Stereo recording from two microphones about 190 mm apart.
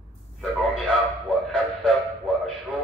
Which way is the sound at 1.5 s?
5° left (ahead or behind).